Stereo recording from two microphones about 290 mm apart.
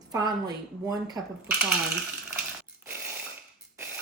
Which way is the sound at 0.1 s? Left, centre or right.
Centre.